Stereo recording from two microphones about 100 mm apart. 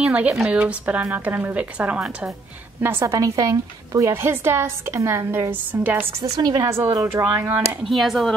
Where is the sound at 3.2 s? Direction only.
35° right (ahead or behind).